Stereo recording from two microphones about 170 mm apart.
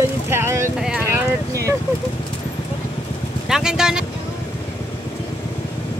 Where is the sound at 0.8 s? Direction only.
5° right (ahead or behind).